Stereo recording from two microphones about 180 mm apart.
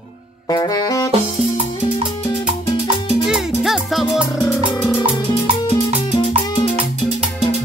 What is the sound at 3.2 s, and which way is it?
Music, centre (ahead or behind).